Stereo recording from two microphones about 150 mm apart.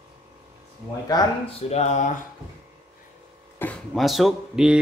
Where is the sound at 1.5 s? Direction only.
45° left (ahead or behind).